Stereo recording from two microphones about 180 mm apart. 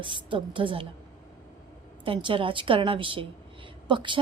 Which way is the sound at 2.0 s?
30° right (ahead or behind).